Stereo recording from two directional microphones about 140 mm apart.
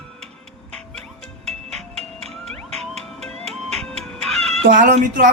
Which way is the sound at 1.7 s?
50° right (ahead or behind).